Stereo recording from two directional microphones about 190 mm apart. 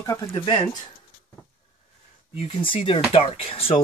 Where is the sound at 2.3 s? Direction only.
30° left (ahead or behind).